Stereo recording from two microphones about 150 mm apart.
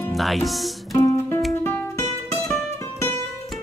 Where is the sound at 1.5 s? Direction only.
15° left (ahead or behind).